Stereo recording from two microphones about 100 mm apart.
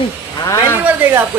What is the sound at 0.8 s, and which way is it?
Speech, 20° right (ahead or behind).